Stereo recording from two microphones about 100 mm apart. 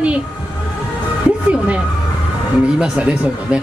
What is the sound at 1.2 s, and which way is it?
Music, 15° right (ahead or behind).